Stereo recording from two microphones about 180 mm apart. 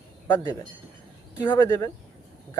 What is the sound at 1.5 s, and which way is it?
Speech, 20° left (ahead or behind).